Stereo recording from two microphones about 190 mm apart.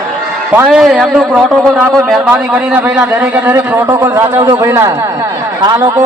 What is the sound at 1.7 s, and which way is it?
A man's voice, 15° right (ahead or behind).